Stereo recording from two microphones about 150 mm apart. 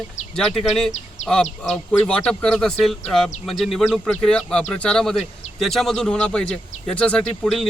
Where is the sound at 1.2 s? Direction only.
50° left (ahead or behind).